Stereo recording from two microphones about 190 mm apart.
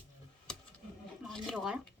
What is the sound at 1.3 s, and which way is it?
Speech, centre (ahead or behind).